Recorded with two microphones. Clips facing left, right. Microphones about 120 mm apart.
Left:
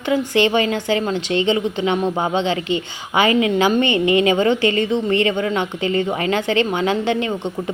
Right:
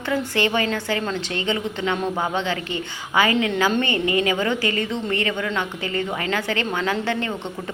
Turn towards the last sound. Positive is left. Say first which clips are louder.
# left 5 dB
turn(degrees=15)  # may be behind; listen again after turning